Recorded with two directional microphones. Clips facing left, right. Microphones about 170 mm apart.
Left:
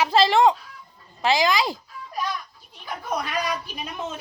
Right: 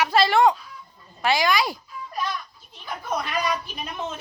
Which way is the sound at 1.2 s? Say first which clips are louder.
Left 1 dB; 20° left (ahead or behind).